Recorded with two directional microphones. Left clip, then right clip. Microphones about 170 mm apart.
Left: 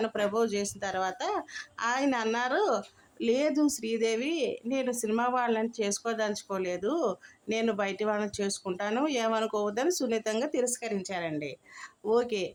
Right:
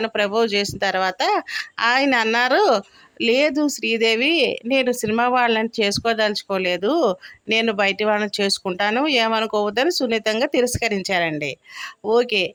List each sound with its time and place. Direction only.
0.1 s speech: 25° right (ahead or behind)
12.0 s speech: 20° right (ahead or behind)